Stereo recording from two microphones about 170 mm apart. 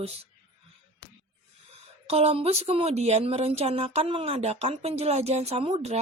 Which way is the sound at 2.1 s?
35° right (ahead or behind).